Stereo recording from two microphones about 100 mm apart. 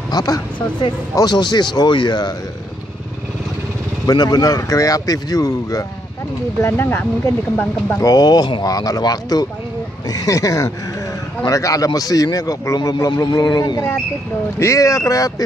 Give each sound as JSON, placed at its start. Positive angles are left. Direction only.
{"t": 0.1, "sound": "speech", "side_deg": 40}
{"t": 4.0, "sound": "a man's voice", "side_deg": 40}
{"t": 6.6, "sound": "speech", "side_deg": 20}
{"t": 8.0, "sound": "a man's voice", "side_deg": 40}